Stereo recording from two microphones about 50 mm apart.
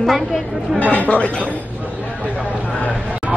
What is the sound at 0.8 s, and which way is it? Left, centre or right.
Speech, left.